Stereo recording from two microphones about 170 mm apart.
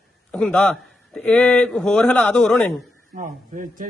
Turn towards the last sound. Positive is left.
turn(degrees=-50)  # may be behind; listen again after turning